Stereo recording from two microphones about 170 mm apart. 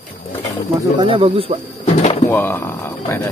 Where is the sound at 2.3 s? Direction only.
15° left (ahead or behind).